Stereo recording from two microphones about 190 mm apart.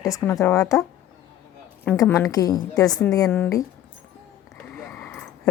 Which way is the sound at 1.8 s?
10° left (ahead or behind).